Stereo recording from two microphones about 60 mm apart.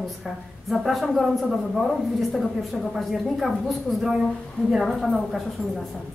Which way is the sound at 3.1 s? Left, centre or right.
Centre.